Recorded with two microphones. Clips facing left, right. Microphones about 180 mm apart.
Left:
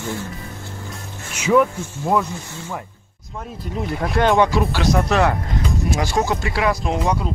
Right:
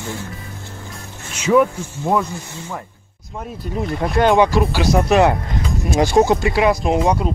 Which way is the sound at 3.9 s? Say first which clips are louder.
Right 2 dB; centre (ahead or behind).